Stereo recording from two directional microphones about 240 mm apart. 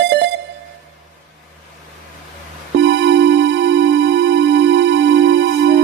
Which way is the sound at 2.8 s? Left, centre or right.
Right.